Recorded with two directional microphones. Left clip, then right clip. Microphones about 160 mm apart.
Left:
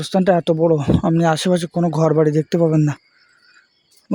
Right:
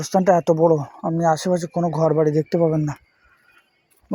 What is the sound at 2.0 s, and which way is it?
Speech, 40° left (ahead or behind).